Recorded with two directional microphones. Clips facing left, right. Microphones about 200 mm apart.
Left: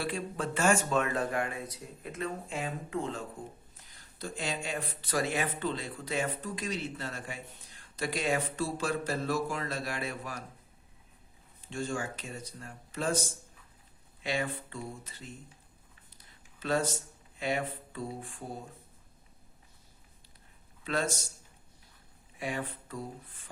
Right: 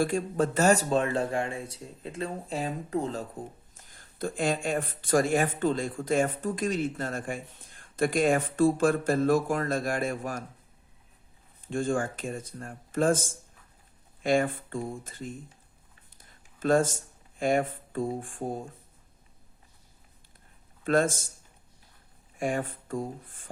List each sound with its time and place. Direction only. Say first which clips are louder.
0.0 s speech: right 8 dB; 45° right (ahead or behind)
3.8 s speech: right 11 dB; 50° right (ahead or behind)
11.6 s speech: right 7 dB; 50° right (ahead or behind)
20.8 s speech: right 8 dB; 50° right (ahead or behind)
22.4 s speech: right 6 dB; 45° right (ahead or behind)